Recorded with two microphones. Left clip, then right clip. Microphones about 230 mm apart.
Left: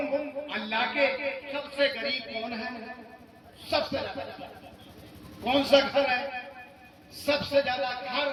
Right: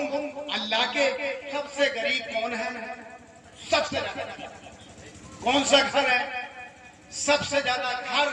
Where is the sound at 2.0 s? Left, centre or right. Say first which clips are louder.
Right 5 dB; centre.